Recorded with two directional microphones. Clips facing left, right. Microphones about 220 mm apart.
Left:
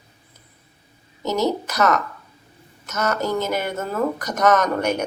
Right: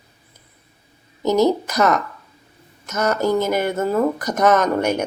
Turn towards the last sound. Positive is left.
turn(degrees=-10)  # may be behind; listen again after turning